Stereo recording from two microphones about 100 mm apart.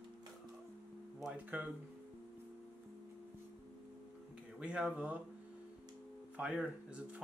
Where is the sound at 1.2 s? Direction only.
15° right (ahead or behind).